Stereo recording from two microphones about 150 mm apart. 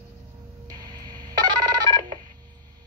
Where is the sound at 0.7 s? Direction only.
25° right (ahead or behind).